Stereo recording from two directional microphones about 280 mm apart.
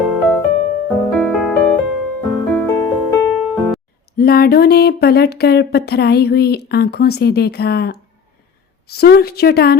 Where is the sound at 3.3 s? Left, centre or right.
Centre.